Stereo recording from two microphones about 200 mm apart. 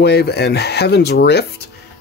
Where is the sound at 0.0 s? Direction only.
55° left (ahead or behind).